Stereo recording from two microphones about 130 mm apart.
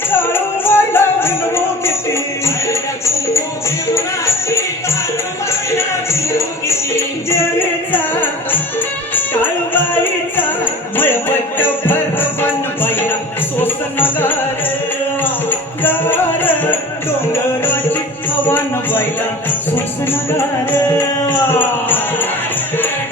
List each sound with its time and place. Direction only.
0.2 s music: 15° left (ahead or behind)
3.9 s music: 20° left (ahead or behind)
9.4 s music: 15° left (ahead or behind)
10.9 s jingle bell: 15° left (ahead or behind)
12.4 s music: 15° left (ahead or behind)
18.4 s music: 15° left (ahead or behind)
21.6 s music: 15° left (ahead or behind)